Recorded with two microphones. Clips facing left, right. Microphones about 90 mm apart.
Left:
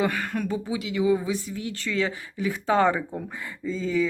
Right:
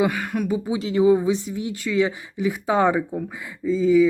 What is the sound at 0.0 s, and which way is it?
Speech, 15° right (ahead or behind).